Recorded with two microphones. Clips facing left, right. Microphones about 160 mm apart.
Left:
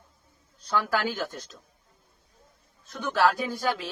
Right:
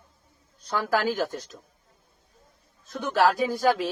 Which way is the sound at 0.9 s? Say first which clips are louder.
Right 4 dB; 60° right (ahead or behind).